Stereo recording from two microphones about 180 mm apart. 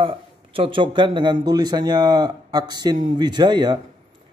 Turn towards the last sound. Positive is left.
turn(degrees=-25)  # may be behind; listen again after turning